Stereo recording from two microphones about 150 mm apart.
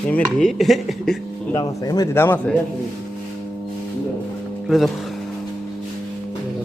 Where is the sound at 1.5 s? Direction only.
25° left (ahead or behind).